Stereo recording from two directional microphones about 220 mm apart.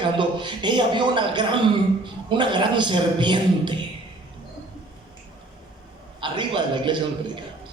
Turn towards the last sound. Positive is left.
turn(degrees=-20)  # may be behind; listen again after turning